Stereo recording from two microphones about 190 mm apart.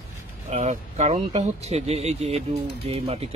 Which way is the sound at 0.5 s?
35° right (ahead or behind).